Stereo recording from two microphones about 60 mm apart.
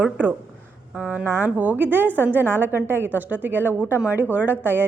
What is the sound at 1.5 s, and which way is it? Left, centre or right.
A woman's voice, right.